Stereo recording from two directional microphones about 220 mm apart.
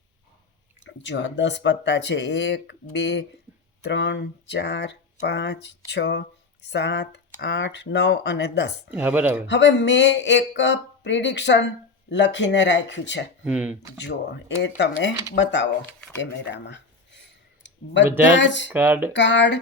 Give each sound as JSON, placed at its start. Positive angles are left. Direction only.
{"t": 0.9, "sound": "speech", "side_deg": 55}
{"t": 8.9, "sound": "speech", "side_deg": -5}
{"t": 9.5, "sound": "speech", "side_deg": 55}
{"t": 13.4, "sound": "speech", "side_deg": -5}
{"t": 14.0, "sound": "speech", "side_deg": 50}
{"t": 18.3, "sound": "speech", "side_deg": 55}
{"t": 18.7, "sound": "speech", "side_deg": -10}
{"t": 19.1, "sound": "speech", "side_deg": 55}